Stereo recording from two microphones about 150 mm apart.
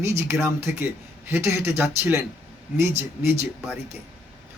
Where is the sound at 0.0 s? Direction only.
15° right (ahead or behind).